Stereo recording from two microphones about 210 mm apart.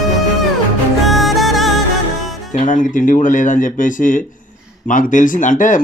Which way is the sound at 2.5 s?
35° left (ahead or behind).